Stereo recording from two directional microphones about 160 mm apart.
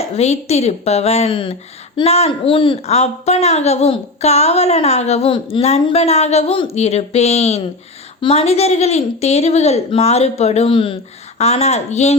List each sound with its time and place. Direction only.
0.0 s a woman's voice: 40° left (ahead or behind)